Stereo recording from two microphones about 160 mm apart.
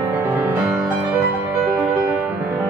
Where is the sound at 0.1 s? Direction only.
10° right (ahead or behind).